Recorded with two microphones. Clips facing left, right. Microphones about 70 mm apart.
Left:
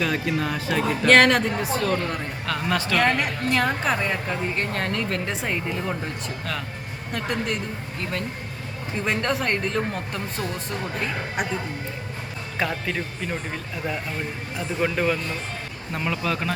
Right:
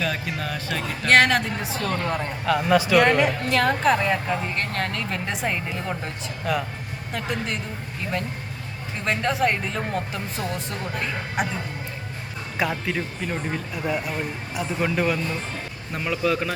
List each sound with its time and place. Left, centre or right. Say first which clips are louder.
0.0 s speech: left 3 dB; centre
6.4 s speech: right 8 dB; centre
7.1 s speech: left 2 dB; centre
9.0 s speech: right 2 dB; centre
12.5 s speech: right 1 dB; centre